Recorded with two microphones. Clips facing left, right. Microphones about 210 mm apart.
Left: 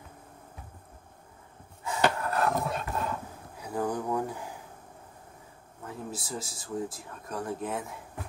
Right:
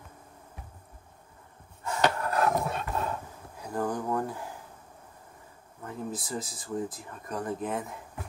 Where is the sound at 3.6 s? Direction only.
10° left (ahead or behind).